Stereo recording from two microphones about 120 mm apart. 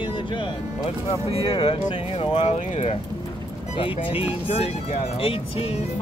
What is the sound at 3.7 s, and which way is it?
Speech, 50° left (ahead or behind).